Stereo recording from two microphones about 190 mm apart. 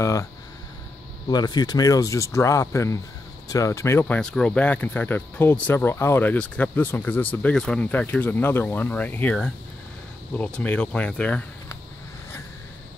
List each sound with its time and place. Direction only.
0.0 s speech: 15° left (ahead or behind)
1.3 s speech: 20° left (ahead or behind); by 11.4 s 5° left (ahead or behind)